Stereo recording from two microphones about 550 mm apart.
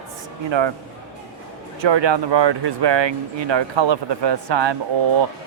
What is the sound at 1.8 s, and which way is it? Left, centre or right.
Speech, right.